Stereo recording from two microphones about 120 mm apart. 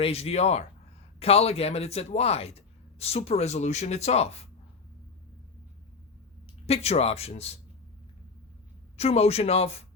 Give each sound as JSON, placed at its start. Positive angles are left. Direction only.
{"t": 0.0, "sound": "speech", "side_deg": 55}
{"t": 6.7, "sound": "speech", "side_deg": 60}
{"t": 9.0, "sound": "speech", "side_deg": 60}